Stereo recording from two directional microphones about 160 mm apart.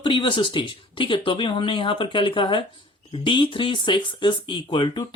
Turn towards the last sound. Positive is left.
turn(degrees=30)  # may be behind; listen again after turning